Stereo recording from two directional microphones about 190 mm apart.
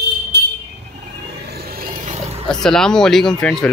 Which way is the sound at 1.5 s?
50° right (ahead or behind).